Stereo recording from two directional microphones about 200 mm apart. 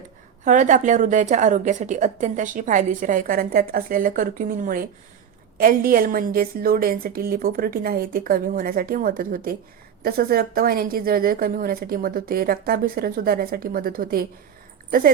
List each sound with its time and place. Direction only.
0.4 s a woman's voice: 40° right (ahead or behind)